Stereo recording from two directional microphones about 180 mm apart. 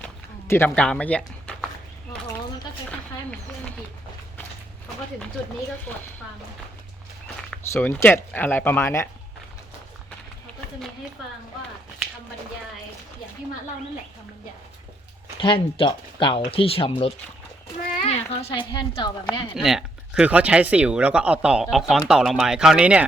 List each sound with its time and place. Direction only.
0.0 s a sound: 10° left (ahead or behind)
7.7 s speech: 15° left (ahead or behind)
15.4 s speech: 30° left (ahead or behind)
19.5 s speech: centre (ahead or behind)